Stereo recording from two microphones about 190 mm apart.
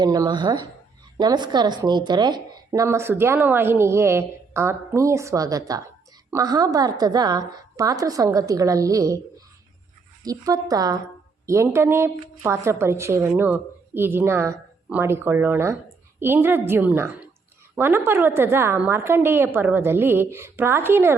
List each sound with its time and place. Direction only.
0.0 s a woman's voice: 20° right (ahead or behind)
10.2 s a woman's voice: 20° right (ahead or behind)